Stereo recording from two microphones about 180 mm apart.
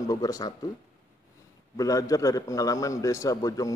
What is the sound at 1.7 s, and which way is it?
A man's voice, 20° left (ahead or behind).